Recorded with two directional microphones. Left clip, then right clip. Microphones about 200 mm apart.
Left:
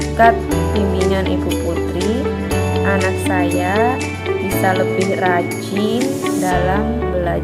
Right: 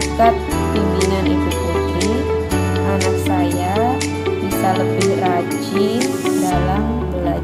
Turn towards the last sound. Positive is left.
turn(degrees=0)  # may be behind; listen again after turning